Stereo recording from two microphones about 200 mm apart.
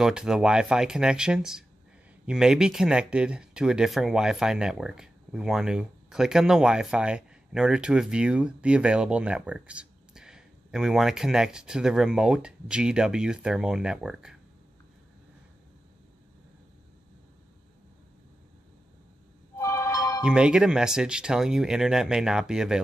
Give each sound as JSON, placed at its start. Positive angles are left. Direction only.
{"t": 0.0, "sound": "speech", "side_deg": -5}
{"t": 19.5, "sound": "music", "side_deg": 15}
{"t": 20.2, "sound": "speech", "side_deg": -5}